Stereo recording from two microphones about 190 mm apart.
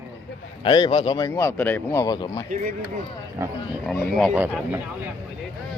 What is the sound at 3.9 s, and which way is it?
Speech, centre (ahead or behind).